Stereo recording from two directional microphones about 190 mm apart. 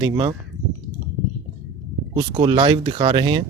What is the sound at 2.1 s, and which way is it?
Speech, 25° right (ahead or behind).